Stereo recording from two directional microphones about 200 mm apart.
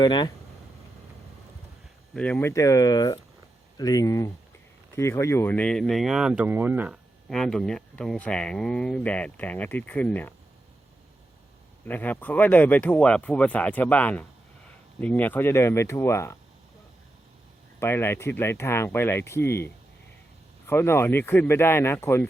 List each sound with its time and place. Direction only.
0.0 s speech: 20° left (ahead or behind)
2.1 s speech: 5° left (ahead or behind)
11.9 s speech: 10° left (ahead or behind)
17.7 s speech: 10° left (ahead or behind)